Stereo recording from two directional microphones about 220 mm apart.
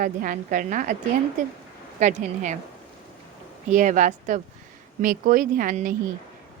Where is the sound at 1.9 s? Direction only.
35° right (ahead or behind).